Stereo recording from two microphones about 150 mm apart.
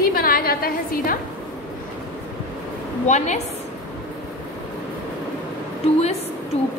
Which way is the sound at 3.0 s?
50° left (ahead or behind).